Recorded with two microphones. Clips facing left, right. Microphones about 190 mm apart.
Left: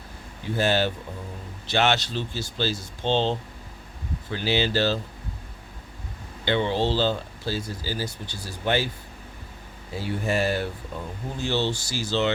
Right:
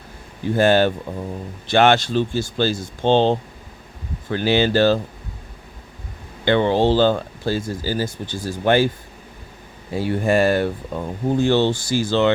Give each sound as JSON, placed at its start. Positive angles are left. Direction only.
{"t": 0.5, "sound": "speech", "side_deg": -50}
{"t": 6.4, "sound": "speech", "side_deg": -55}
{"t": 9.9, "sound": "speech", "side_deg": -55}